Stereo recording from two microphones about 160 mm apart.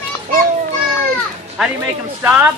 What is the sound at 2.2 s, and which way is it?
Speech, 10° right (ahead or behind).